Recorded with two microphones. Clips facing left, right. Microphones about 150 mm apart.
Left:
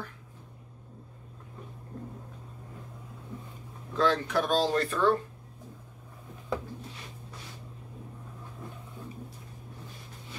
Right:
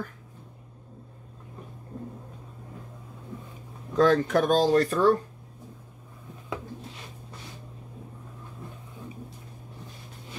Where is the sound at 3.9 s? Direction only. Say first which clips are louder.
Right 6 dB; 45° right (ahead or behind).